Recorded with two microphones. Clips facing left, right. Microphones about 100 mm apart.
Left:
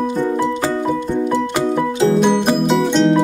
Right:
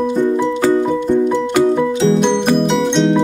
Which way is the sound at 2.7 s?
Centre (ahead or behind).